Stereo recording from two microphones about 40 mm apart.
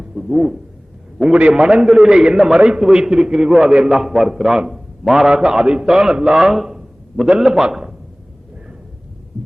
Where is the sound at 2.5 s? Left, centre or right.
Right.